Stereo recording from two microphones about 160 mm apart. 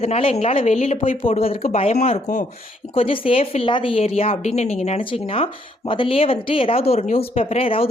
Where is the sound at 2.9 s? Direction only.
35° left (ahead or behind).